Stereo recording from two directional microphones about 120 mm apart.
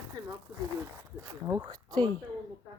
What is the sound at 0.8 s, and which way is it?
Speech, 30° right (ahead or behind).